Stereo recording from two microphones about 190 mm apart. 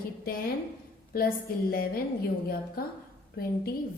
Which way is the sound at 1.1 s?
50° left (ahead or behind).